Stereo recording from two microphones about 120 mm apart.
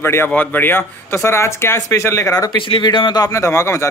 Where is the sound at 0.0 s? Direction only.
20° left (ahead or behind).